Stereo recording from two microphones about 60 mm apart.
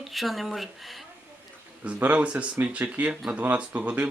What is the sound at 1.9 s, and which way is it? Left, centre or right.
Speech, right.